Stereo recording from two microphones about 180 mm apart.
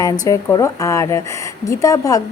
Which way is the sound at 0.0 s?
20° left (ahead or behind).